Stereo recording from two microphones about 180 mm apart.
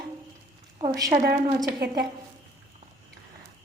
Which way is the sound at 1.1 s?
60° right (ahead or behind).